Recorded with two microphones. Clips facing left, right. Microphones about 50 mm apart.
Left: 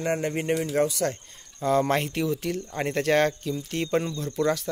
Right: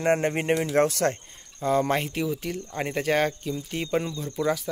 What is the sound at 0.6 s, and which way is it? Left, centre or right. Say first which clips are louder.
Speech: right 2 dB; right.